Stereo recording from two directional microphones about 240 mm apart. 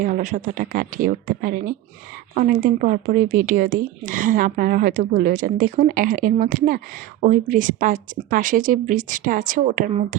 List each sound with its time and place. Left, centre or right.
0.0 s speech: right